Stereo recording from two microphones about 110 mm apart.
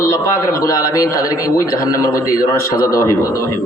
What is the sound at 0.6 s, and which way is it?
A man's voice, 30° left (ahead or behind).